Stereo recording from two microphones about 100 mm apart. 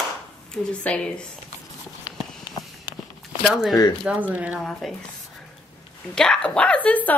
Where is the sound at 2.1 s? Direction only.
35° left (ahead or behind).